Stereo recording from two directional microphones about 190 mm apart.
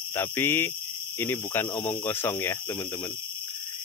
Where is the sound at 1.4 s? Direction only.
20° left (ahead or behind).